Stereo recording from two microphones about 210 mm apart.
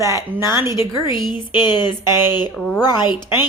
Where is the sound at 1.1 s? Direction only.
45° right (ahead or behind).